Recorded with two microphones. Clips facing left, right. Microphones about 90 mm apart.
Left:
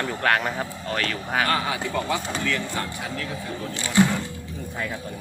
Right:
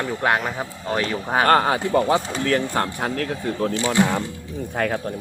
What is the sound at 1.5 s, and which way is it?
Speech, 45° right (ahead or behind).